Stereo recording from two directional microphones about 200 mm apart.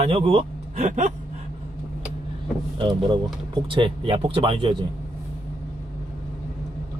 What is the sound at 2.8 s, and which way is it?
Speech, 20° right (ahead or behind).